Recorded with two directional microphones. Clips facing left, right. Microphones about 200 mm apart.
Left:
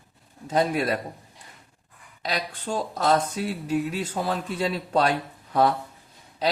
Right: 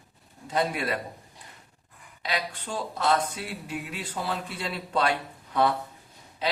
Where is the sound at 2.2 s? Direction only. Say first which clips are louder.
Left 2 dB; 40° left (ahead or behind).